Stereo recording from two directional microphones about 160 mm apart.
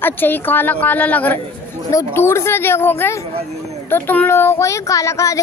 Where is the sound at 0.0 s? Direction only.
10° left (ahead or behind).